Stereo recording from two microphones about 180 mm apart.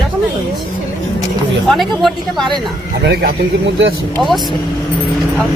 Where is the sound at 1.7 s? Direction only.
Centre (ahead or behind).